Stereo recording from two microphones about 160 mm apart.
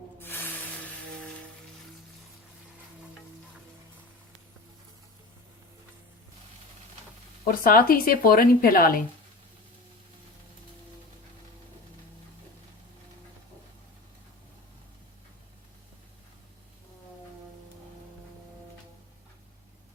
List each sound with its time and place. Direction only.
0.2 s music: 15° left (ahead or behind)
7.4 s speech: 65° left (ahead or behind)